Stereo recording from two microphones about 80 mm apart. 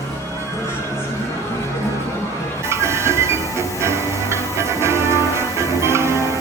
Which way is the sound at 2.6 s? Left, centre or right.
Right.